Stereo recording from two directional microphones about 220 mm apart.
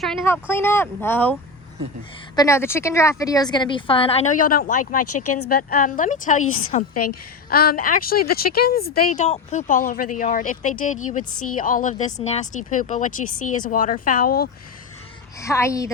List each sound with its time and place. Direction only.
0.0 s a woman's voice: centre (ahead or behind); by 4.8 s 40° left (ahead or behind)
5.0 s speech: 90° left
5.5 s speech: 40° left (ahead or behind)
6.4 s a woman's voice: 70° left (ahead or behind)
6.9 s speech: 90° left
7.5 s speech: 45° left (ahead or behind)
9.1 s speech: 30° left (ahead or behind)
11.2 s a woman's voice: 85° left
11.5 s speech: 40° left (ahead or behind)
15.4 s speech: 15° left (ahead or behind)